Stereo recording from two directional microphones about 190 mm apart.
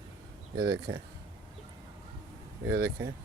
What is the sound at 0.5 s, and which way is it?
Speech, 60° right (ahead or behind).